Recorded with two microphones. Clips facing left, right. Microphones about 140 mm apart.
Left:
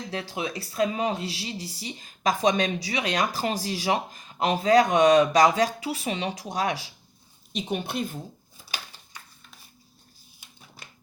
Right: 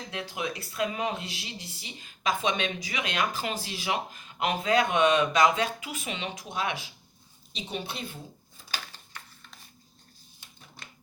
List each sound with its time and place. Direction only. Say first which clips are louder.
0.1 s speech: left 2 dB; 30° left (ahead or behind)
7.5 s a woman's voice: left 7 dB; 50° left (ahead or behind)
8.7 s a sound: even; 10° left (ahead or behind)
10.8 s typewriter: even; 5° left (ahead or behind)